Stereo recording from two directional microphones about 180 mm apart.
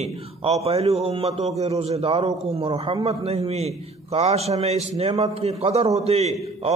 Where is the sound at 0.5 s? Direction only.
35° right (ahead or behind).